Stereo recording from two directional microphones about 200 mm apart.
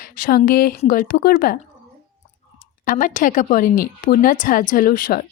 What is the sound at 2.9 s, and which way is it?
Speech, 40° left (ahead or behind).